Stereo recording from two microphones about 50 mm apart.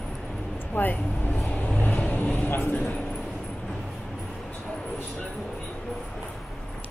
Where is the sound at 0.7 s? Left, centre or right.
Left.